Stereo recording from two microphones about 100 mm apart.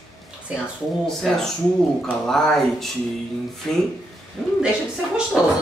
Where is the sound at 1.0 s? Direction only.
5° left (ahead or behind).